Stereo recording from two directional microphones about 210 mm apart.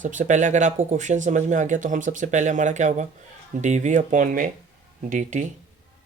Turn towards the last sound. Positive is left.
turn(degrees=-35)  # may be behind; listen again after turning